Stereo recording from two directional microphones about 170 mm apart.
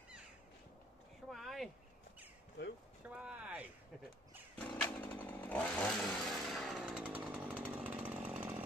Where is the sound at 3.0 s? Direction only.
10° right (ahead or behind).